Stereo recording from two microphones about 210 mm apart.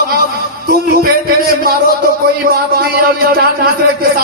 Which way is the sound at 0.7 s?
45° right (ahead or behind).